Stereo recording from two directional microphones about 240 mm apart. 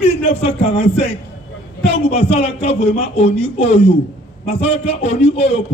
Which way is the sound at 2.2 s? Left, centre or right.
Left.